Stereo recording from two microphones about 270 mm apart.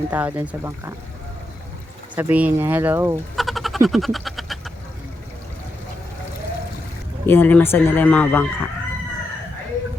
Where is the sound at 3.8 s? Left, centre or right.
Centre.